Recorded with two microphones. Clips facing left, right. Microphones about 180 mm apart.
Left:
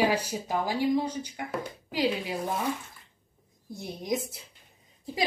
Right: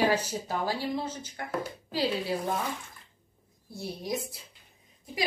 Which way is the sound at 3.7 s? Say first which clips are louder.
Left 3 dB; 20° left (ahead or behind).